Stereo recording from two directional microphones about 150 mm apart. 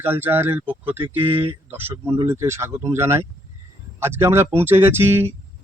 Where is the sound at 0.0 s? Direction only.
15° right (ahead or behind).